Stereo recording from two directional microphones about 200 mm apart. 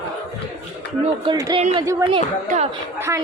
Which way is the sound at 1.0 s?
25° right (ahead or behind).